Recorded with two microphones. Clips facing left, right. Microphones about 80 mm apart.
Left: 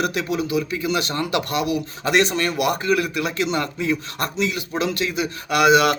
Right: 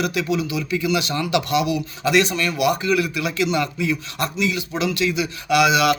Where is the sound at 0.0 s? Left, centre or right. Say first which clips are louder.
Right 1 dB; left.